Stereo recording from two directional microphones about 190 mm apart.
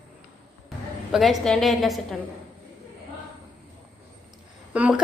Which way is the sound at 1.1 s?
Centre (ahead or behind).